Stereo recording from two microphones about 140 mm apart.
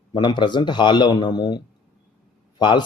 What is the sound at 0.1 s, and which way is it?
Speech, 30° left (ahead or behind).